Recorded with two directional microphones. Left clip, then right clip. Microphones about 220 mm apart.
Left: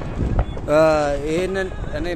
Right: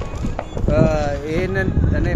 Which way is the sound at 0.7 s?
40° left (ahead or behind).